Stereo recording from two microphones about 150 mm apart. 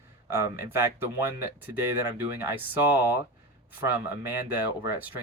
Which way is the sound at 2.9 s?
15° right (ahead or behind).